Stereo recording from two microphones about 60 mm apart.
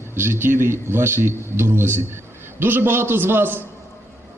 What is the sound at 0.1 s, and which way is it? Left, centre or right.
A man's voice, right.